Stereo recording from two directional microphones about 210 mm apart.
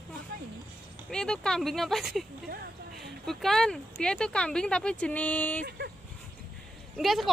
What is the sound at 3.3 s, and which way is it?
Speech, centre (ahead or behind).